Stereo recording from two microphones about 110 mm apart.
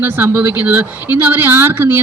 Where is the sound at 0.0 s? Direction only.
15° right (ahead or behind).